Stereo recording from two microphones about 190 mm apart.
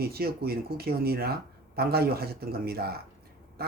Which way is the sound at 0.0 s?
55° right (ahead or behind).